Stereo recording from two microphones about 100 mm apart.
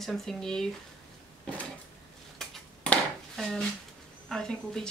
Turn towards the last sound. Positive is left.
turn(degrees=5)  # may be behind; listen again after turning